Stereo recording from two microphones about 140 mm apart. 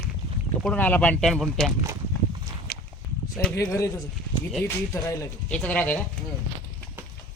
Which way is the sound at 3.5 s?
20° left (ahead or behind).